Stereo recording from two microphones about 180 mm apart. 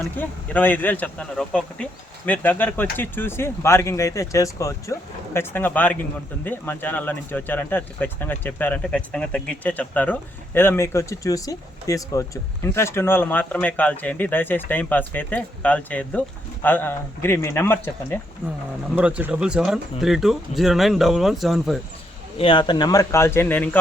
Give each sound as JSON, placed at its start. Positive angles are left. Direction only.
{"t": 0.2, "sound": "speech", "side_deg": 10}
{"t": 18.4, "sound": "speech", "side_deg": -10}
{"t": 22.4, "sound": "speech", "side_deg": 30}